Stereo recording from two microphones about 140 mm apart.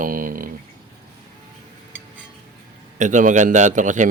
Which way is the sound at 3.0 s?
65° right (ahead or behind).